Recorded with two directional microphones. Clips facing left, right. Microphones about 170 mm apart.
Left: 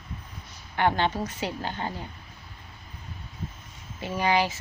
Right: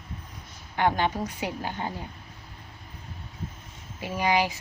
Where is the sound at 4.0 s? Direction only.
10° right (ahead or behind).